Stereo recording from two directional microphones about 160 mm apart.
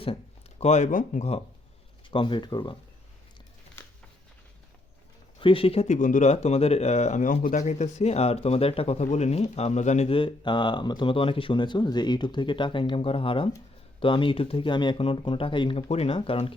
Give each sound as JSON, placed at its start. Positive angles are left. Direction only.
{"t": 0.6, "sound": "speech", "side_deg": 45}
{"t": 2.0, "sound": "speech", "side_deg": 30}
{"t": 5.4, "sound": "speech", "side_deg": 35}